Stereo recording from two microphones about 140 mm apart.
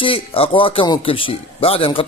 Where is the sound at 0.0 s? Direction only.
40° left (ahead or behind).